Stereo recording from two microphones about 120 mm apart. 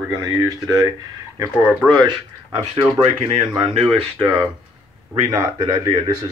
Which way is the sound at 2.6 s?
40° right (ahead or behind).